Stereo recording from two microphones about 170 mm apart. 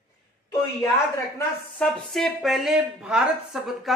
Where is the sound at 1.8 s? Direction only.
5° left (ahead or behind).